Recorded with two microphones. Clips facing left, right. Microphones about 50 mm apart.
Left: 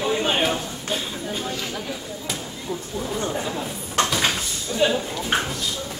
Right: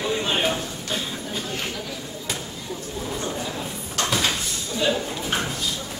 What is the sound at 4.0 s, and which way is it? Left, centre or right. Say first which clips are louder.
Cupboard open or close: left 5 dB; left.